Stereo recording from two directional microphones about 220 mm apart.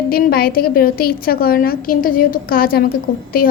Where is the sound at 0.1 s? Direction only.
40° left (ahead or behind).